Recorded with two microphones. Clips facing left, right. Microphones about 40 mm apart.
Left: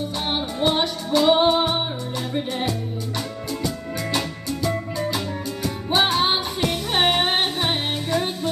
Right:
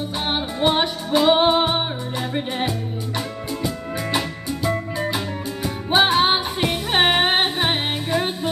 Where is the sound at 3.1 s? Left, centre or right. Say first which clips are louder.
Right 2 dB; right.